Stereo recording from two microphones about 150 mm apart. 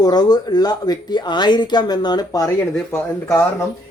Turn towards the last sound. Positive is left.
turn(degrees=10)  # may be behind; listen again after turning